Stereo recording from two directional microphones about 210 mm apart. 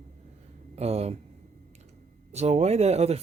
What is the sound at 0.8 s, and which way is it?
Speech, 30° right (ahead or behind).